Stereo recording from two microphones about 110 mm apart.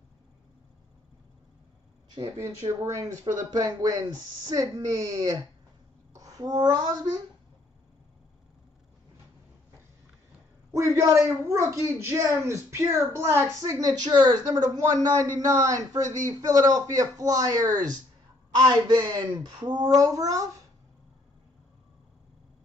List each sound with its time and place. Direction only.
2.3 s speech: 25° right (ahead or behind)
10.7 s a woman's voice: 30° right (ahead or behind)